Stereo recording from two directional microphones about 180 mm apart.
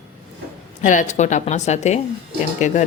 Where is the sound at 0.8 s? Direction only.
45° left (ahead or behind).